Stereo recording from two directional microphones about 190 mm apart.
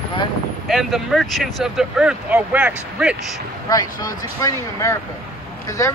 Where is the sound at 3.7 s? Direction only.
20° left (ahead or behind).